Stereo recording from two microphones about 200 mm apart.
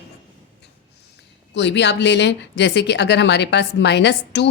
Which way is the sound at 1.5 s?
65° left (ahead or behind).